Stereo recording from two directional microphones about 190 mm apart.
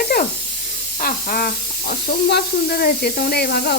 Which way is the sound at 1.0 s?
50° left (ahead or behind).